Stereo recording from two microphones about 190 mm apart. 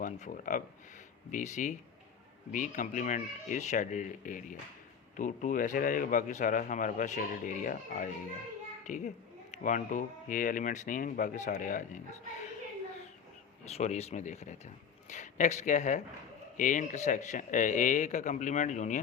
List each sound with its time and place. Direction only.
0.0 s speech: 45° left (ahead or behind)
13.7 s speech: 35° left (ahead or behind)